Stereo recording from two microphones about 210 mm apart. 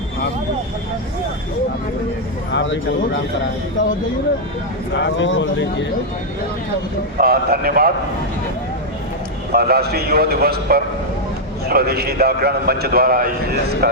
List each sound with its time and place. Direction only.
2.5 s speech: 55° left (ahead or behind)
4.9 s speech: 60° left (ahead or behind)
7.2 s a man's voice: 45° right (ahead or behind)
9.5 s a man's voice: 50° right (ahead or behind)